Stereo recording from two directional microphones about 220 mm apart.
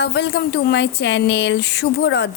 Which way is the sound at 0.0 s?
50° left (ahead or behind).